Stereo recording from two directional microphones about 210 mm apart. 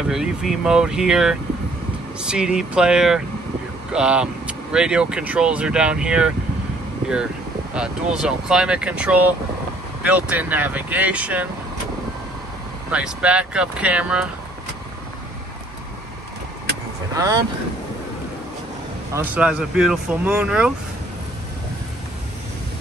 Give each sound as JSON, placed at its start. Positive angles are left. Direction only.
{"t": 0.1, "sound": "speech", "side_deg": -5}
{"t": 7.7, "sound": "speech", "side_deg": -5}
{"t": 12.9, "sound": "speech", "side_deg": -5}
{"t": 17.1, "sound": "speech", "side_deg": -15}
{"t": 19.1, "sound": "speech", "side_deg": -5}